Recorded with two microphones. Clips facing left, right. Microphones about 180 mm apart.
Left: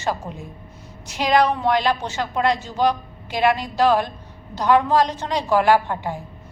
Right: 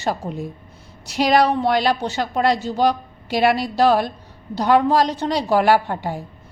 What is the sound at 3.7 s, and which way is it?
A woman's voice, 35° right (ahead or behind).